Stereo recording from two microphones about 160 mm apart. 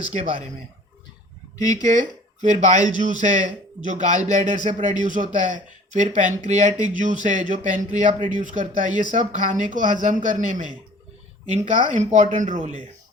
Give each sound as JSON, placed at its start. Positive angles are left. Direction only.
{"t": 0.1, "sound": "speech", "side_deg": -45}
{"t": 1.7, "sound": "speech", "side_deg": -50}